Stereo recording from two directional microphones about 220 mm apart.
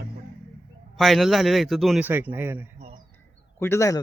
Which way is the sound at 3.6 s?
15° left (ahead or behind).